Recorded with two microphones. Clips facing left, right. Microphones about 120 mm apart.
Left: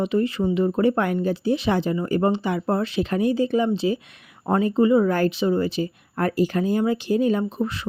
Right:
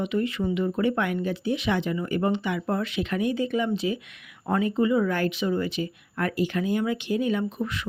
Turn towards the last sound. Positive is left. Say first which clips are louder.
# left 4 dB
turn(degrees=35)  # may be behind; listen again after turning